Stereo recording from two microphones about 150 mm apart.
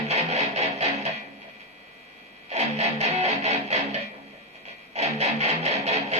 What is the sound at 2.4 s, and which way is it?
Music, 45° right (ahead or behind).